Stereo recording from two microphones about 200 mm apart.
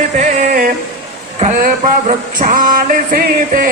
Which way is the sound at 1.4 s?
40° right (ahead or behind).